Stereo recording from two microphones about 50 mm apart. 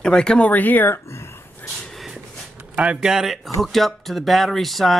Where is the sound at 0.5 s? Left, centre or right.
Left.